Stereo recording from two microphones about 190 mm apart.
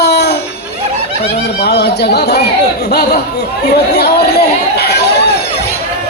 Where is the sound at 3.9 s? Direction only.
60° left (ahead or behind).